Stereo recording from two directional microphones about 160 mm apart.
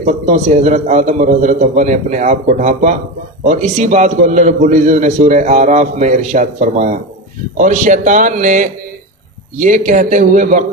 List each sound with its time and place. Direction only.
0.0 s a man's voice: 45° right (ahead or behind)